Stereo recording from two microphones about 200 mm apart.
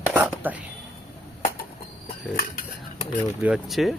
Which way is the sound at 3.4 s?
5° right (ahead or behind).